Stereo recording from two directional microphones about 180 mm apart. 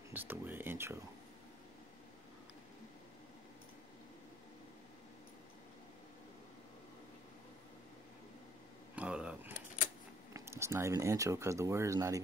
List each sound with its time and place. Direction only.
0.1 s speech: 10° right (ahead or behind)
8.9 s a sound: 5° right (ahead or behind)
10.3 s speech: 15° right (ahead or behind)